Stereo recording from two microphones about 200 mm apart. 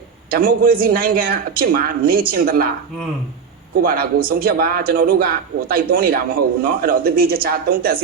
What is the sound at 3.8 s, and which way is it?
A man's voice, 50° right (ahead or behind).